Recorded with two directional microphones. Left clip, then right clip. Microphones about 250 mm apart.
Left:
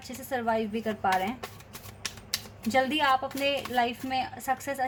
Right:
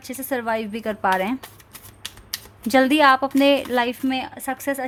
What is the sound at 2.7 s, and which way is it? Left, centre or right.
A woman's voice, right.